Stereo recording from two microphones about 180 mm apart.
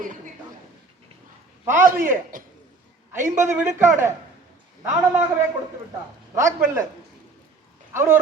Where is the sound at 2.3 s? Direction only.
50° right (ahead or behind).